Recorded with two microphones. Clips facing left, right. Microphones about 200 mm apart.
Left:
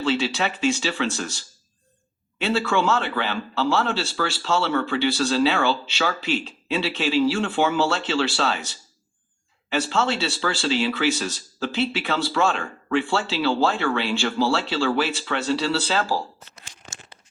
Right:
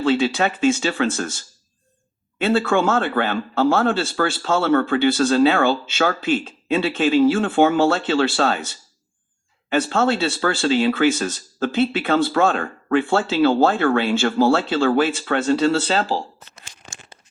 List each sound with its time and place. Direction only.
0.0 s speech: 50° right (ahead or behind)
9.6 s speech: 50° right (ahead or behind)